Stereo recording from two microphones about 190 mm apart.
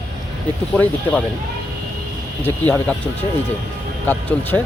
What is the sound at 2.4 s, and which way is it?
Speech, 10° left (ahead or behind).